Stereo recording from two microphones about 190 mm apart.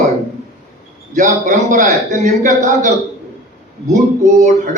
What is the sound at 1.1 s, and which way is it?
A man's voice, 45° right (ahead or behind).